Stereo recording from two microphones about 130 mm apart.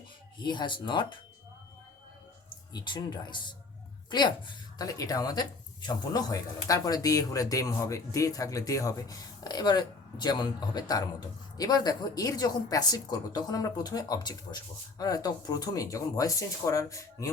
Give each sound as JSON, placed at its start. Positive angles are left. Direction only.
{"t": 0.3, "sound": "speech", "side_deg": 35}
{"t": 2.5, "sound": "a woman's voice", "side_deg": 35}